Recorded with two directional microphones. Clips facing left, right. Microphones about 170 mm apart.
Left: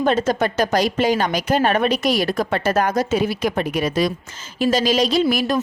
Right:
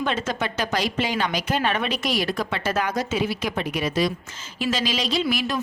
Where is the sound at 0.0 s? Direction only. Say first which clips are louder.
Left 7 dB; 40° left (ahead or behind).